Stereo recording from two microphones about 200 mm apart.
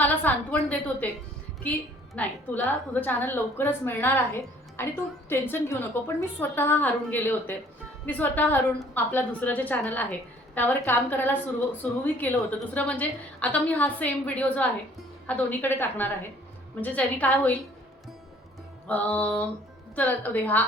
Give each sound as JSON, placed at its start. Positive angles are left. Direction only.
{"t": 0.0, "sound": "a woman's voice", "side_deg": 10}
{"t": 2.1, "sound": "a woman's voice", "side_deg": 10}
{"t": 18.9, "sound": "a woman's voice", "side_deg": 10}